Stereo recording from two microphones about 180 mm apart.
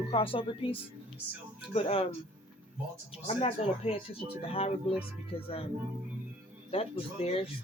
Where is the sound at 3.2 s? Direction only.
35° left (ahead or behind).